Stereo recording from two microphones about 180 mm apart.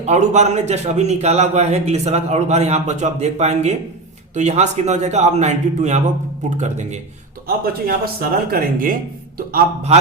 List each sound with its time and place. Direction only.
0.0 s a man's voice: 40° right (ahead or behind)
7.4 s a man's voice: 55° right (ahead or behind)